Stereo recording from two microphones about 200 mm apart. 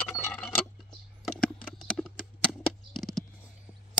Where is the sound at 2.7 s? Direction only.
Centre (ahead or behind).